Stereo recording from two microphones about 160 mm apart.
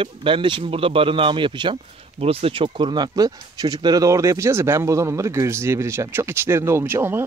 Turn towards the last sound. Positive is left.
turn(degrees=-15)  # may be behind; listen again after turning